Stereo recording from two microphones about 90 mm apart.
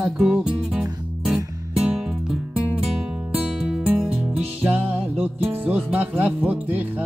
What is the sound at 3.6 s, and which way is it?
Music, 5° right (ahead or behind).